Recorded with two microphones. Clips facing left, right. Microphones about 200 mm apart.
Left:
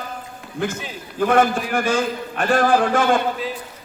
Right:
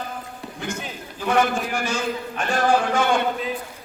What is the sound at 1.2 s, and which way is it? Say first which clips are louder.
A man's voice: left 4 dB; 55° left (ahead or behind).